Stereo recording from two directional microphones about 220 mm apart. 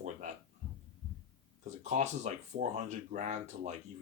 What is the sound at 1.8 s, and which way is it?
Speech, 30° right (ahead or behind).